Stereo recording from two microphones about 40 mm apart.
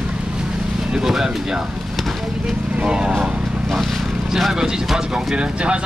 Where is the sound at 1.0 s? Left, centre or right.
Centre.